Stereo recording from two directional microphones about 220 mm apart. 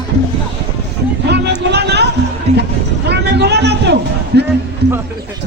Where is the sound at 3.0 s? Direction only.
50° right (ahead or behind).